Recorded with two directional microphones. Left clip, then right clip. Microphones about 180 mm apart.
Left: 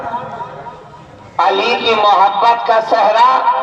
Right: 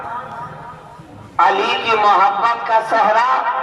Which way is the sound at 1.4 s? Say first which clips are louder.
Left 1 dB; 25° left (ahead or behind).